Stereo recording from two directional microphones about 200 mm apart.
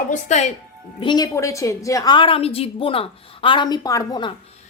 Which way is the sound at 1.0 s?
20° left (ahead or behind).